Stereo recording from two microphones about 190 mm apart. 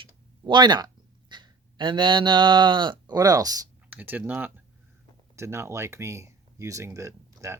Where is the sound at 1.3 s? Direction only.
25° right (ahead or behind).